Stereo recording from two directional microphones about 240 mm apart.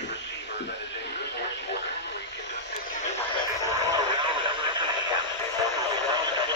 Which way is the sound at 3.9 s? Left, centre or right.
Centre.